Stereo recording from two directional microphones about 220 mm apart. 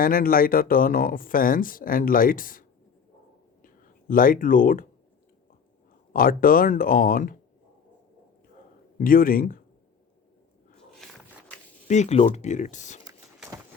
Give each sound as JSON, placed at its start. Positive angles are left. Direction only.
{"t": 0.0, "sound": "speech", "side_deg": 40}
{"t": 4.1, "sound": "speech", "side_deg": 40}
{"t": 6.1, "sound": "speech", "side_deg": 40}
{"t": 9.0, "sound": "speech", "side_deg": 40}
{"t": 11.0, "sound": "biting", "side_deg": 5}
{"t": 11.9, "sound": "speech", "side_deg": 30}